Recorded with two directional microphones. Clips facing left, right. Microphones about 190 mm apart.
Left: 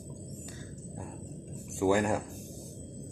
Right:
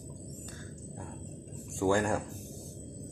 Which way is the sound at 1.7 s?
10° left (ahead or behind).